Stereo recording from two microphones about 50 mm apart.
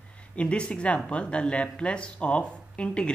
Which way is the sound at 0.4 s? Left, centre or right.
Left.